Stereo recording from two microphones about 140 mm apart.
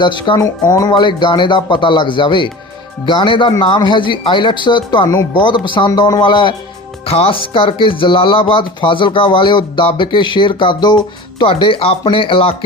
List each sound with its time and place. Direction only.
0.0 s speech: 35° left (ahead or behind)
0.3 s speech: 25° left (ahead or behind); by 12.5 s 40° left (ahead or behind)